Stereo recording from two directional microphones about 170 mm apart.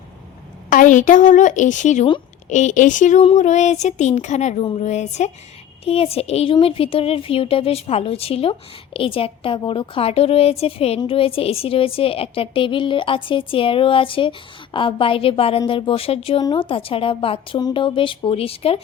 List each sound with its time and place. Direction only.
0.7 s a woman's voice: 50° left (ahead or behind)